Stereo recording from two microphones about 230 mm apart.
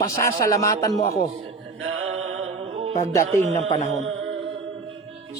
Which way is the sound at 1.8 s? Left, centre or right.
Right.